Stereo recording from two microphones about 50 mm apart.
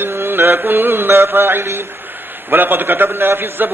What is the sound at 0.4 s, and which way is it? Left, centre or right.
A man's voice, right.